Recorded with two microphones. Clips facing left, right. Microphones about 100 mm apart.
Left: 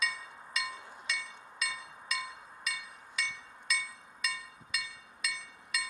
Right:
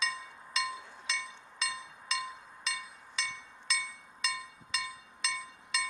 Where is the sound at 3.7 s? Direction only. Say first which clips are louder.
Even; 30° right (ahead or behind).